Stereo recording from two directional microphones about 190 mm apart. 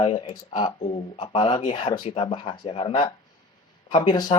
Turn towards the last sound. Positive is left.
turn(degrees=20)  # may be behind; listen again after turning